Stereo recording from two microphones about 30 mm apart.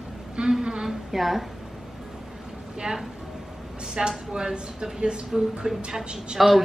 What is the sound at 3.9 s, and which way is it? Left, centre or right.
A woman's voice, right.